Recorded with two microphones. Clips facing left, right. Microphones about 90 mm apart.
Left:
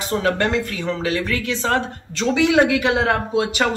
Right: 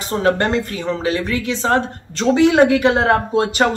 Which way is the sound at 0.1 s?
30° right (ahead or behind).